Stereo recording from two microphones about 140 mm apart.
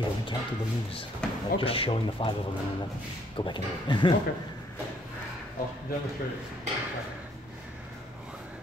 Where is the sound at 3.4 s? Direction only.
35° left (ahead or behind).